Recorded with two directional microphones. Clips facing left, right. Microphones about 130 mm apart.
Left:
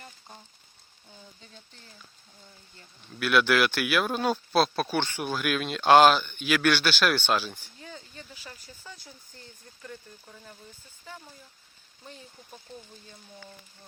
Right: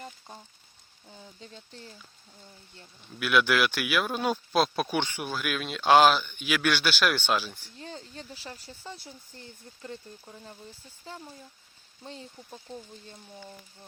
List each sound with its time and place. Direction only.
3.1 s speech: 5° right (ahead or behind)
7.8 s a sound: 35° right (ahead or behind)
8.9 s speech: 25° right (ahead or behind)